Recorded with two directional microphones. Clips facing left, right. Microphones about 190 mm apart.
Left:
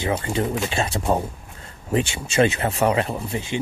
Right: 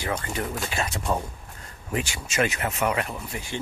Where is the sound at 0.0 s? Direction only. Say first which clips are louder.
Left 6 dB; 25° left (ahead or behind).